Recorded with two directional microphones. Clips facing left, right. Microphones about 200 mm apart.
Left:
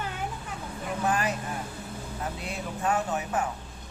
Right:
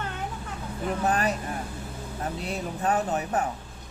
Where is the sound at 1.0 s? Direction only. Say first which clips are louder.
Right 1 dB; 40° right (ahead or behind).